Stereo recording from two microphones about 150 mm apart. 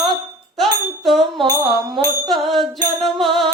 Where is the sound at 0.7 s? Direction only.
Centre (ahead or behind).